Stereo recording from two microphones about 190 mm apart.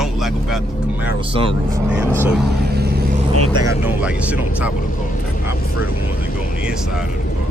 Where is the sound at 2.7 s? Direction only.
55° right (ahead or behind).